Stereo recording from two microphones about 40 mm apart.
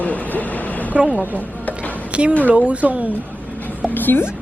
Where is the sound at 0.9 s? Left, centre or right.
Right.